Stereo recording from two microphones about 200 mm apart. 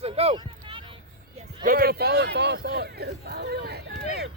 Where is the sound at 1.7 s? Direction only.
50° right (ahead or behind).